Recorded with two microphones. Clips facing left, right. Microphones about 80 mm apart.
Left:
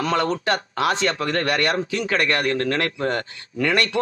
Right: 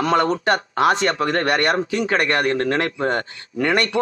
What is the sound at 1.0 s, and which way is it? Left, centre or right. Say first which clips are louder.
A man's voice: right 3 dB; right.